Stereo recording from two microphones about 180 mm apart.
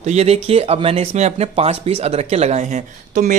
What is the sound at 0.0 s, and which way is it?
Speech, 35° right (ahead or behind).